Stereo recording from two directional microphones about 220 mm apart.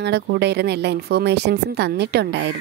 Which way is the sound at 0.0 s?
50° right (ahead or behind).